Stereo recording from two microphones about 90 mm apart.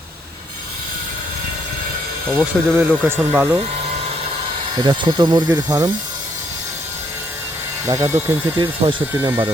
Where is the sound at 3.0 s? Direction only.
20° right (ahead or behind).